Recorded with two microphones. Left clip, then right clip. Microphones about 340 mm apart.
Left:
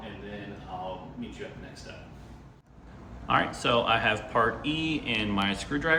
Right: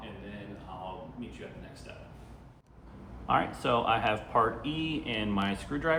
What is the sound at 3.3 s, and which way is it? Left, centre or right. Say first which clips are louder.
Speech: left 2 dB; centre.